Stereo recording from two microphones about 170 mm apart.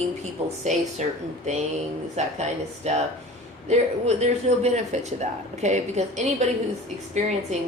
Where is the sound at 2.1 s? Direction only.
40° right (ahead or behind).